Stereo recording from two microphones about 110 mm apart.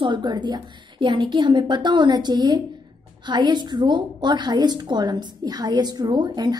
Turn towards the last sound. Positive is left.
turn(degrees=-40)  # may be behind; listen again after turning